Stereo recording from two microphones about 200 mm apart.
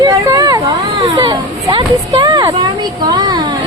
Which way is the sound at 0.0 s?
15° right (ahead or behind).